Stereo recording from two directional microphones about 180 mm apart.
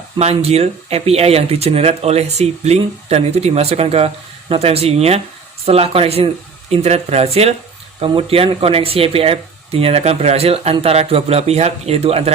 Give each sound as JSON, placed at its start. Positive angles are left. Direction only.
{"t": 0.2, "sound": "speech", "side_deg": -35}